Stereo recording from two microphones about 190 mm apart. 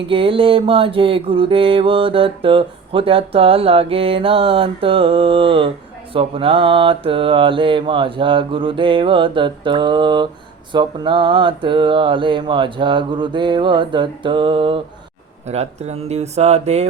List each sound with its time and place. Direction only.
0.1 s mantra: 30° right (ahead or behind)
15.4 s speech: 35° right (ahead or behind)